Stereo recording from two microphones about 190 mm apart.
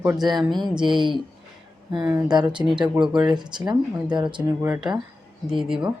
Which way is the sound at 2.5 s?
5° right (ahead or behind).